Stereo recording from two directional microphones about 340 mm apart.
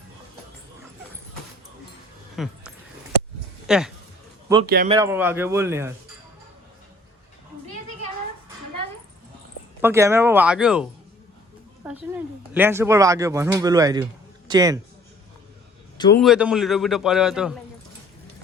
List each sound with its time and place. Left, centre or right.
2.3 s a sound: centre
3.7 s speech: centre
4.6 s speech: right
4.9 s speech: centre
9.8 s a man's voice: centre
16.0 s a man's voice: centre
16.2 s a man's voice: centre